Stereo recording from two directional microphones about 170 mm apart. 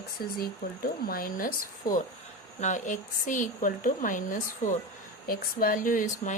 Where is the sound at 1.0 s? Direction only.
60° left (ahead or behind).